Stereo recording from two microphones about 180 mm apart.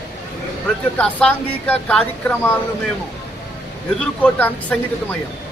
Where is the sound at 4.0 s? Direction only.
5° left (ahead or behind).